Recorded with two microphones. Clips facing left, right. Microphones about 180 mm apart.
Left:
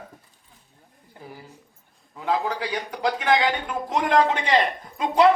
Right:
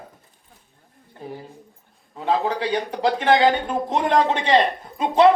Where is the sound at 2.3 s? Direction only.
25° right (ahead or behind).